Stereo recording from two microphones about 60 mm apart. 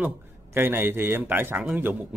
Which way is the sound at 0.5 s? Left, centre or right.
Right.